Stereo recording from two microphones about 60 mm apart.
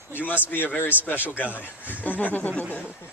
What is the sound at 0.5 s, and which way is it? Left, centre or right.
Speech, left.